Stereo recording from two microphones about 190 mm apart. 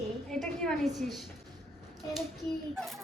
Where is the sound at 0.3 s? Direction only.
5° left (ahead or behind).